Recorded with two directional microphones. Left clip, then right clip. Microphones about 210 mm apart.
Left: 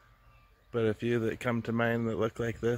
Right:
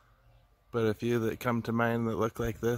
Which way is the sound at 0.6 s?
15° right (ahead or behind).